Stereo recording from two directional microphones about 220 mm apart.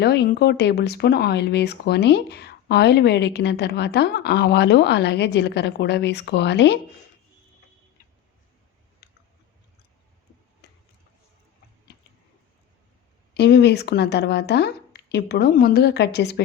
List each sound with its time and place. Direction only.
0.0 s speech: 50° left (ahead or behind)
9.0 s chewing: 50° left (ahead or behind)
10.6 s a sound: 50° left (ahead or behind)
13.3 s speech: 45° left (ahead or behind)